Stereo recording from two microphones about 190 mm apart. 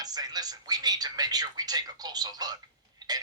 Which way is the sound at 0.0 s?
20° right (ahead or behind).